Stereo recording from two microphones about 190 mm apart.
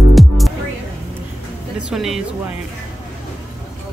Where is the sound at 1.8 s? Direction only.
5° right (ahead or behind).